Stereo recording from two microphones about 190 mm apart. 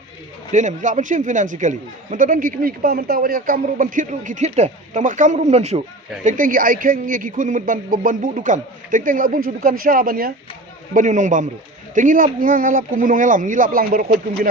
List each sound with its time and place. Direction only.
0.5 s speech: 40° right (ahead or behind)
6.2 s speech: 45° right (ahead or behind)